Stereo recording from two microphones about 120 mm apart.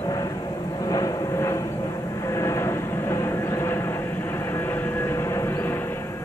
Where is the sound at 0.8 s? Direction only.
30° left (ahead or behind).